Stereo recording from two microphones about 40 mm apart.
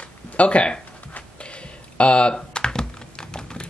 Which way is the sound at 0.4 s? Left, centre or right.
Left.